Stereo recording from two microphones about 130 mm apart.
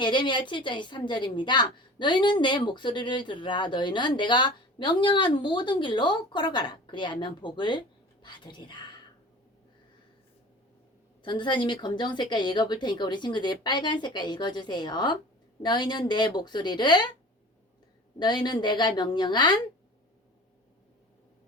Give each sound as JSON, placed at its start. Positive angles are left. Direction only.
{"t": 0.0, "sound": "a woman's voice", "side_deg": 35}
{"t": 11.2, "sound": "a woman's voice", "side_deg": 40}
{"t": 18.2, "sound": "a woman's voice", "side_deg": 35}